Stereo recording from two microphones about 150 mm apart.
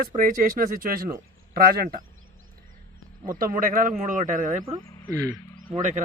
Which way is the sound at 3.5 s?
70° right (ahead or behind).